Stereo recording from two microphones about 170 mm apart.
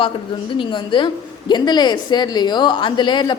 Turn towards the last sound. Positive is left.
turn(degrees=25)  # may be behind; listen again after turning